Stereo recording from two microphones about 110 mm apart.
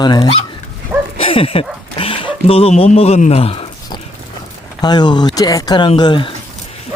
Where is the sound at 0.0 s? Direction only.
40° left (ahead or behind).